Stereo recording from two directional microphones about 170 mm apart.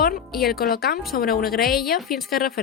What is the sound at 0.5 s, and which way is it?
A woman's voice, 60° left (ahead or behind).